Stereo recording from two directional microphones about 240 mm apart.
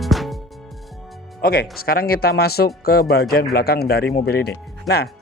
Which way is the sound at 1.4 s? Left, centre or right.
Left.